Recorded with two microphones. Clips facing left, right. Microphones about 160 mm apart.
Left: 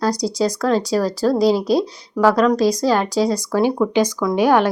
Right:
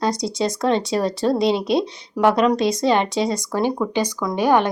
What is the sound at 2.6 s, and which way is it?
Speech, 25° right (ahead or behind).